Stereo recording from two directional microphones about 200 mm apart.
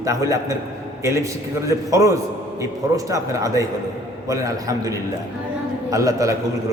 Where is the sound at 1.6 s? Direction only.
15° right (ahead or behind).